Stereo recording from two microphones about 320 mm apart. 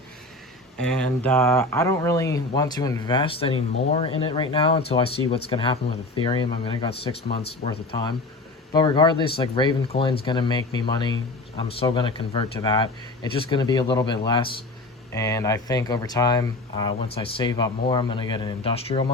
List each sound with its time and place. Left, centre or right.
0.8 s speech: centre